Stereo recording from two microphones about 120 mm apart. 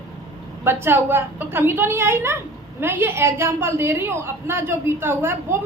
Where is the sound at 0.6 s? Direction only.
20° right (ahead or behind).